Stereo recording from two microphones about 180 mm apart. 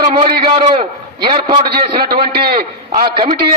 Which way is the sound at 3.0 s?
25° right (ahead or behind).